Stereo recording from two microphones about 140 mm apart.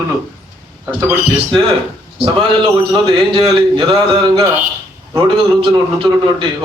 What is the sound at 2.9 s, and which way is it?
A man's voice, 35° right (ahead or behind).